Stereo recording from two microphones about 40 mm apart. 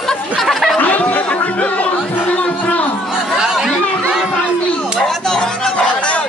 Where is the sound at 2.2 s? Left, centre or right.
Left.